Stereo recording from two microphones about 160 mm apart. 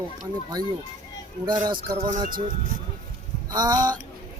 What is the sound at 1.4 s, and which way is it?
Speech, 30° right (ahead or behind).